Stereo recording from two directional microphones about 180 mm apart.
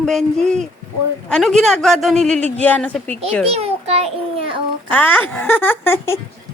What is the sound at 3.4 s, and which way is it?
A child's voice, 35° right (ahead or behind).